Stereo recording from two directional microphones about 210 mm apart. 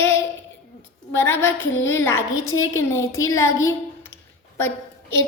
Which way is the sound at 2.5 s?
75° left (ahead or behind).